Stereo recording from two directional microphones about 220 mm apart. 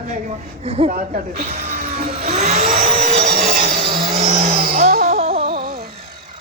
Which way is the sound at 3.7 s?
25° right (ahead or behind).